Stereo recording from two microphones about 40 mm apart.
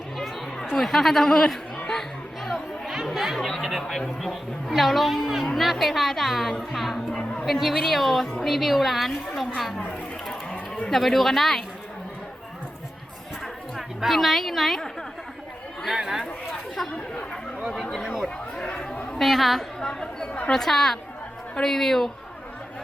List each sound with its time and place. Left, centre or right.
0.8 s speech: centre
1.9 s music: centre
2.5 s chatter: centre
3.3 s chatter: centre
3.6 s chatter: centre
3.8 s a woman's voice: centre
10.8 s a woman's voice: centre
13.4 s a sound: centre
18.0 s chatter: centre
18.6 s chatter: left
19.2 s a woman's voice: centre
19.9 s chatter: centre
20.5 s speech: centre